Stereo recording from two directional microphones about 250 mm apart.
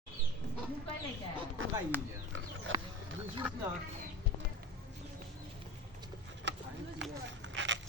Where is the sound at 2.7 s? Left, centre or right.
Right.